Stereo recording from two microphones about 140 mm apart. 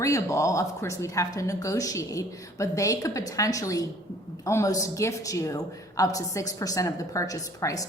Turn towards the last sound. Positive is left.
turn(degrees=25)  # may be behind; listen again after turning